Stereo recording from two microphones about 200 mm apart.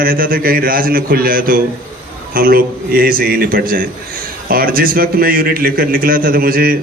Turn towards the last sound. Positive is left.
turn(degrees=-45)  # may be behind; listen again after turning